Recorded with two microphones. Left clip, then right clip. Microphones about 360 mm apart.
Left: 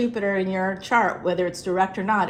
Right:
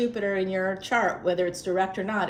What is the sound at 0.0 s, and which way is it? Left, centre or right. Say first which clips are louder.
Speech: left 2 dB; centre.